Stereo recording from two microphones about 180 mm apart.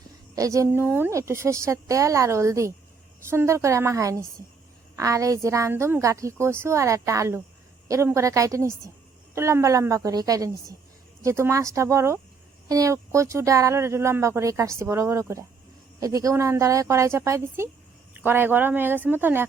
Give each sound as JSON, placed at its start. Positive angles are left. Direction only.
{"t": 0.3, "sound": "speech", "side_deg": -20}